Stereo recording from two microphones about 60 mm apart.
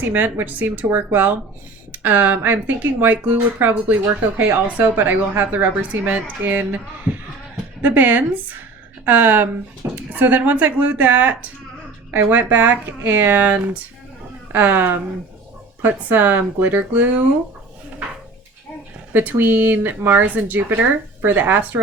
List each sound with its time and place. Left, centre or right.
0.0 s a woman's voice: right
19.1 s speech: right